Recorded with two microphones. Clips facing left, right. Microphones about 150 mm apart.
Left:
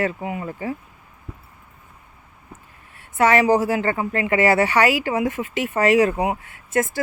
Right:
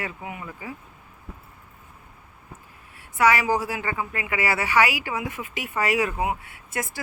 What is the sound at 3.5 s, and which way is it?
Speech, 45° left (ahead or behind).